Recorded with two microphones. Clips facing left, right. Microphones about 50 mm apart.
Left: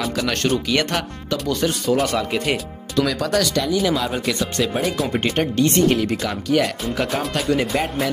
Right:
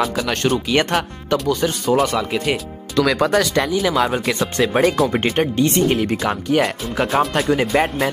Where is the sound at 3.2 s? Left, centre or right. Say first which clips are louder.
Right 3 dB; right.